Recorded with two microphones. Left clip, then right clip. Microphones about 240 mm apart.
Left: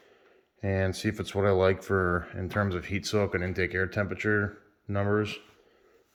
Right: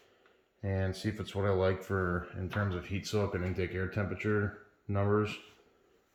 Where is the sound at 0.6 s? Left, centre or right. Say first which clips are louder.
Left 7 dB; centre.